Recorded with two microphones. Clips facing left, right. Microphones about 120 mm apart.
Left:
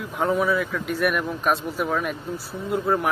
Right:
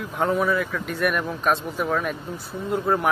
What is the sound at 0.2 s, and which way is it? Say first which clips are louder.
Speech: even; centre (ahead or behind).